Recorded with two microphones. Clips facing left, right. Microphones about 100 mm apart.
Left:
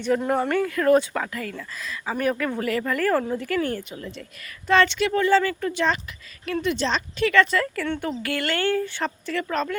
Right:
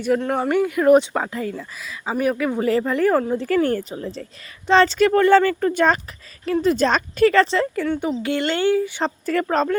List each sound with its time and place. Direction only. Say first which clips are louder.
0.2 s speech: right 1 dB; centre (ahead or behind)
0.4 s speech: right 4 dB; 15° right (ahead or behind)
2.1 s speech: right 4 dB; 10° right (ahead or behind)
2.6 s speech: right 5 dB; 25° right (ahead or behind)
3.3 s a woman's voice: right 6 dB; 35° right (ahead or behind)
4.9 s speech: right 6 dB; 50° right (ahead or behind)
6.4 s a woman's voice: right 6 dB; 35° right (ahead or behind)
6.8 s a woman's voice: right 7 dB; 50° right (ahead or behind); by 9.0 s 15° right (ahead or behind)
9.2 s a woman's voice: right 8 dB; 45° right (ahead or behind)